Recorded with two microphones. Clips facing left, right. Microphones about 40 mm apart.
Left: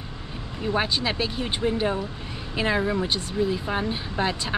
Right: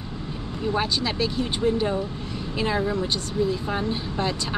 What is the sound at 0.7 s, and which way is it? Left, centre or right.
Speech, centre.